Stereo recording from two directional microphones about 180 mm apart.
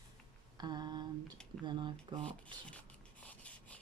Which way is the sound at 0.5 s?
25° right (ahead or behind).